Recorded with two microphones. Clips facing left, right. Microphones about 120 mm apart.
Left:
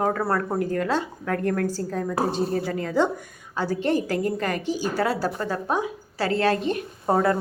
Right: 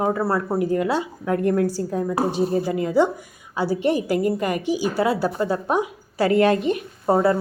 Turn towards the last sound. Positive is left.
turn(degrees=-5)  # may be behind; listen again after turning